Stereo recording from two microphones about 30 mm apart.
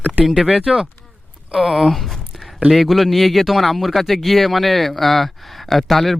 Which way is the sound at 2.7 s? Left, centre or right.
Centre.